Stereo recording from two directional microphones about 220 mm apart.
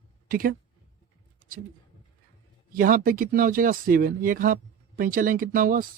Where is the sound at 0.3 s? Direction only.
40° right (ahead or behind).